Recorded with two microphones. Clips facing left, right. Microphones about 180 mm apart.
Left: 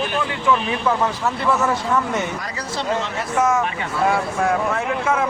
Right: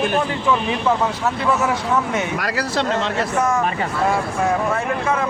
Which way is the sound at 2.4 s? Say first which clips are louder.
Right 6 dB; 85° right.